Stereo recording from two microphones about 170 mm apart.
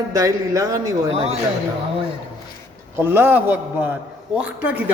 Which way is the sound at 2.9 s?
15° right (ahead or behind).